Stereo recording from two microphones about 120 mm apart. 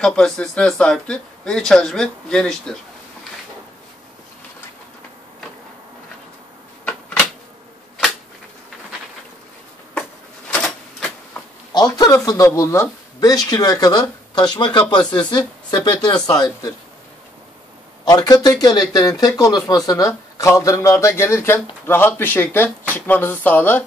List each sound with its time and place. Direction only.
0.0 s speech: 5° left (ahead or behind)
11.7 s speech: 35° left (ahead or behind)
18.0 s a man's voice: 35° left (ahead or behind); by 23.8 s 15° left (ahead or behind)